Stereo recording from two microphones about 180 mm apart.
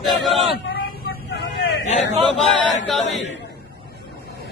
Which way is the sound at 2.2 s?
Centre (ahead or behind).